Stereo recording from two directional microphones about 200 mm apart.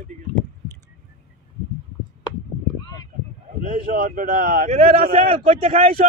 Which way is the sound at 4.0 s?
45° right (ahead or behind).